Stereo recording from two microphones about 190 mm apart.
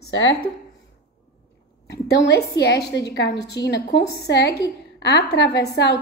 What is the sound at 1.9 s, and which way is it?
A woman's voice, 70° left (ahead or behind).